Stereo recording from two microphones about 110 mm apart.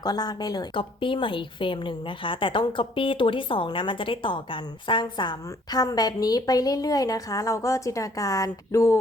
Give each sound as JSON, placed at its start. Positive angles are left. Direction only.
{"t": 0.0, "sound": "speech", "side_deg": 35}
{"t": 0.7, "sound": "a woman's voice", "side_deg": 50}